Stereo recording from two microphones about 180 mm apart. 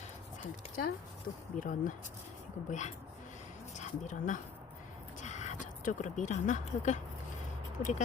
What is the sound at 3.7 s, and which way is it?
Speech, 45° left (ahead or behind).